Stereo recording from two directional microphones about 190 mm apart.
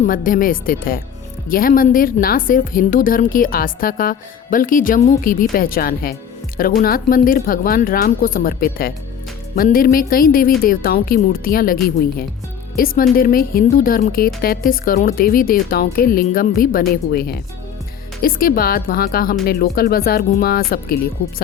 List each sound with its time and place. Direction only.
0.1 s speech: 45° left (ahead or behind)